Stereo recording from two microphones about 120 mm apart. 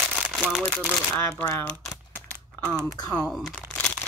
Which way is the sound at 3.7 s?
5° left (ahead or behind).